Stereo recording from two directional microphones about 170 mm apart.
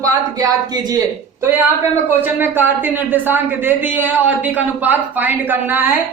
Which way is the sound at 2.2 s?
10° right (ahead or behind).